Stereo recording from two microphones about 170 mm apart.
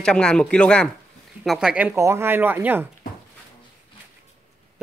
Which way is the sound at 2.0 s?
15° right (ahead or behind).